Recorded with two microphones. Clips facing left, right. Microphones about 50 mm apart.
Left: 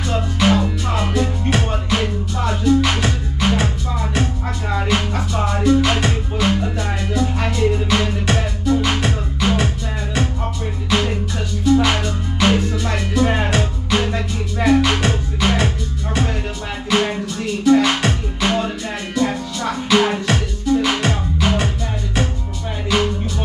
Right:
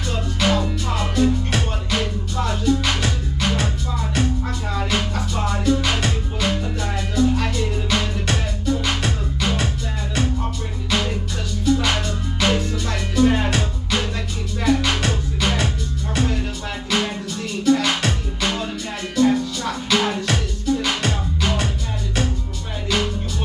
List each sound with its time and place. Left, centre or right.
0.1 s music: centre
5.8 s music: centre
6.0 s music: centre
10.9 s music: centre
16.9 s music: left
22.8 s music: centre